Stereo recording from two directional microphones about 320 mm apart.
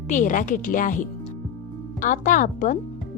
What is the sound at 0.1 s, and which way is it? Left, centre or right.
Speech, left.